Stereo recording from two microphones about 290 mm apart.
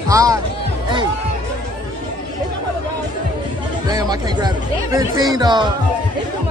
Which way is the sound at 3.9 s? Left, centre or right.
Centre.